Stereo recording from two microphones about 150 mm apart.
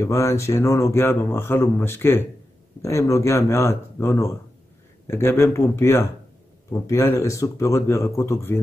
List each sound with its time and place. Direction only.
0.0 s speech: 20° left (ahead or behind)